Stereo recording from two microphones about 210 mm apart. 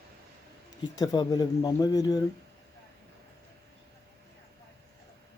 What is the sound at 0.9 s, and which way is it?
Speech, 20° left (ahead or behind).